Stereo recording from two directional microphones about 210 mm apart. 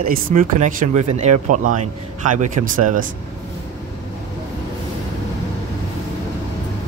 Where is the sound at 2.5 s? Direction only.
40° right (ahead or behind).